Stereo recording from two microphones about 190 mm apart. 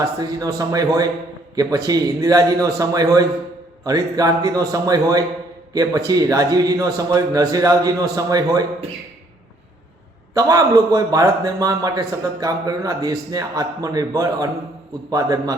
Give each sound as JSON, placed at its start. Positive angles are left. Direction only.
{"t": 0.0, "sound": "a man's voice", "side_deg": -20}
{"t": 10.3, "sound": "a man's voice", "side_deg": -20}